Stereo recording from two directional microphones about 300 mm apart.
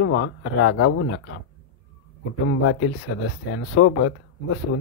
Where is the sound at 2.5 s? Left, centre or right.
Left.